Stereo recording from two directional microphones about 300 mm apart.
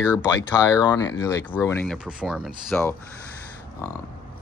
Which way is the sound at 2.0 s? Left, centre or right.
Centre.